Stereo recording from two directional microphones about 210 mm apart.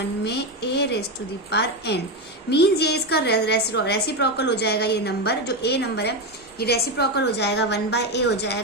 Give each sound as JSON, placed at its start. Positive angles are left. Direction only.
{"t": 0.3, "sound": "a woman's voice", "side_deg": 55}